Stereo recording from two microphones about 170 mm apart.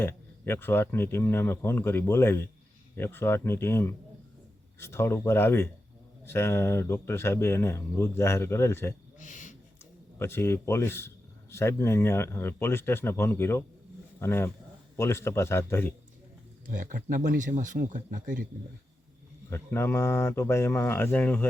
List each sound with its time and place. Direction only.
0.0 s speech: 15° left (ahead or behind)
9.1 s a sound: 50° left (ahead or behind)
10.2 s speech: 15° left (ahead or behind)
16.6 s speech: 50° right (ahead or behind)
19.5 s speech: 15° left (ahead or behind)